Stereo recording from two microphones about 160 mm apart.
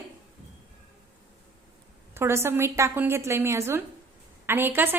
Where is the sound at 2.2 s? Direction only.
15° right (ahead or behind).